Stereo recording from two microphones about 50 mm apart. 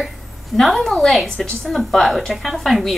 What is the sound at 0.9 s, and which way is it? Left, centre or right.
A woman's voice, centre.